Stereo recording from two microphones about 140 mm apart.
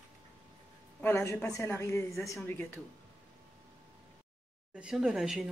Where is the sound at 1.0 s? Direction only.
15° left (ahead or behind).